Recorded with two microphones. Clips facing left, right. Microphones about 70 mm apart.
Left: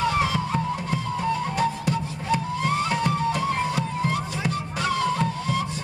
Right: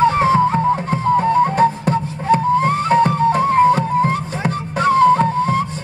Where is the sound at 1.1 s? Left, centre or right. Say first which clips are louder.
Right 12 dB; right.